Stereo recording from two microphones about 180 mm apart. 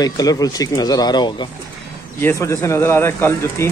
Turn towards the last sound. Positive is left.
turn(degrees=15)  # may be behind; listen again after turning